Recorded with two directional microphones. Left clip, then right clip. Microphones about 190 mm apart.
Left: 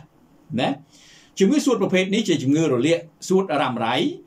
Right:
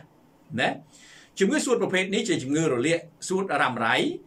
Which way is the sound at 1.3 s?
10° left (ahead or behind).